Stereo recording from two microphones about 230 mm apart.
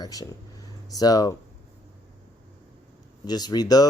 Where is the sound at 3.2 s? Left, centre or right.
Centre.